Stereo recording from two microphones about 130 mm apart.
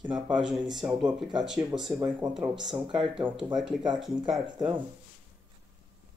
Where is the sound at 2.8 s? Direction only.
40° right (ahead or behind).